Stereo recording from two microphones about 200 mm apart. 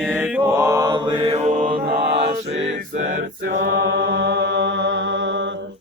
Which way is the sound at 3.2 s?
55° right (ahead or behind).